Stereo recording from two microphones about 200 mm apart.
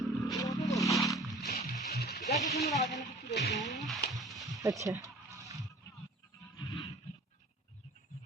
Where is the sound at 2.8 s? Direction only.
Centre (ahead or behind).